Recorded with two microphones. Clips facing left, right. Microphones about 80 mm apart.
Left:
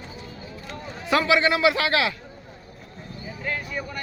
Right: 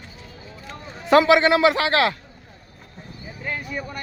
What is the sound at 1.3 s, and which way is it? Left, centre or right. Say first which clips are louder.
Speech: right 3 dB; right.